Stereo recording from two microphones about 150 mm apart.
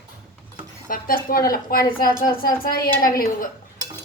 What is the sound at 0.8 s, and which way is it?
A woman's voice, 70° left (ahead or behind).